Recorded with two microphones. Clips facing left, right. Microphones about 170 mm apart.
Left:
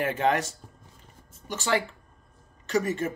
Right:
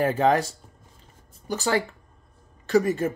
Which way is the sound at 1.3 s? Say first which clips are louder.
Right 2 dB; 35° right (ahead or behind).